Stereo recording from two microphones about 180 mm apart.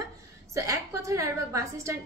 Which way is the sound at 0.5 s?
15° right (ahead or behind).